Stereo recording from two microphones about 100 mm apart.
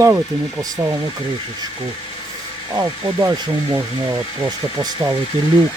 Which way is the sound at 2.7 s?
30° right (ahead or behind).